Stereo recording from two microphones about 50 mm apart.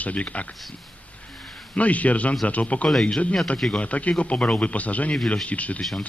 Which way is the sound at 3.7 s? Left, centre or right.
Left.